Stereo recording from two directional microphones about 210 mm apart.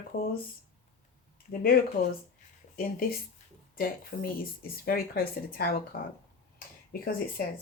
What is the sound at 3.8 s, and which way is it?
A woman's voice, 45° left (ahead or behind).